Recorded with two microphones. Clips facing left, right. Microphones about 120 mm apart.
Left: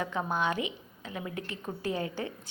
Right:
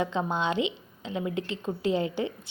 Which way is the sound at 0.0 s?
20° right (ahead or behind).